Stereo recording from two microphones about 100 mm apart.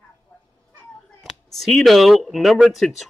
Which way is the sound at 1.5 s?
Centre (ahead or behind).